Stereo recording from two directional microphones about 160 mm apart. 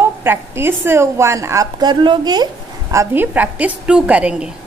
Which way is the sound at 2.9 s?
15° right (ahead or behind).